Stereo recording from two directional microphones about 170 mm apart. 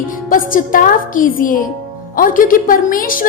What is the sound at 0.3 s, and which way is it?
A woman's voice, 55° left (ahead or behind).